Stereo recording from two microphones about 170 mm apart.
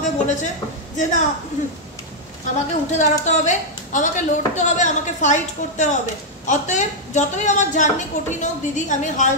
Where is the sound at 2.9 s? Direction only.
45° left (ahead or behind).